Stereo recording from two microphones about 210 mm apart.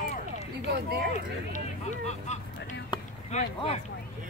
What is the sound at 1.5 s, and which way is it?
Vehicle, 35° left (ahead or behind).